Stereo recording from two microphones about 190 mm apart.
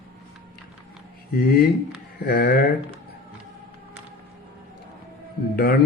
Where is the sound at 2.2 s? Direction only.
55° left (ahead or behind).